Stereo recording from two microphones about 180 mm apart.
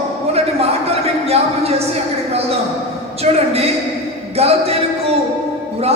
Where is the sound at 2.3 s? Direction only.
35° right (ahead or behind).